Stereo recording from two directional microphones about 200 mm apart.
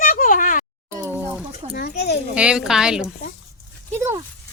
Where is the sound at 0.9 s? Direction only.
15° right (ahead or behind).